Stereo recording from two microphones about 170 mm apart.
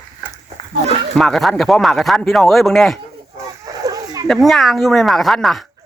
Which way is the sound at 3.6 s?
20° right (ahead or behind).